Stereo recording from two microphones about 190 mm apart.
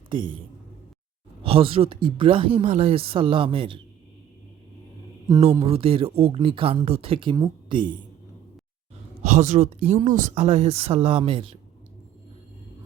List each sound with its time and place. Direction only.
0.1 s speech: 25° right (ahead or behind)
1.5 s speech: 30° right (ahead or behind)
5.5 s speech: 30° right (ahead or behind)
9.2 s speech: 40° right (ahead or behind)